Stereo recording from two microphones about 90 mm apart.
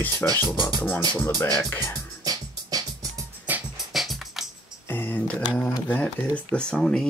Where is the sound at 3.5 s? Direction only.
15° right (ahead or behind).